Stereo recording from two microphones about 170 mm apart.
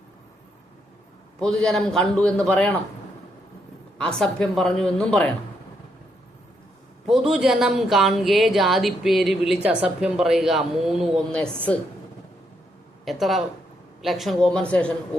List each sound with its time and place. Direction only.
1.4 s speech: 5° left (ahead or behind)
3.9 s speech: 5° left (ahead or behind)
7.1 s speech: 5° right (ahead or behind)
13.1 s speech: centre (ahead or behind)